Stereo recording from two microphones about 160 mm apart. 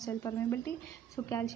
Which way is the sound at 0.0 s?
15° left (ahead or behind).